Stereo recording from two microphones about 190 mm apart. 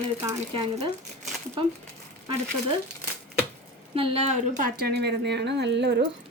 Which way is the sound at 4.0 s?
35° right (ahead or behind).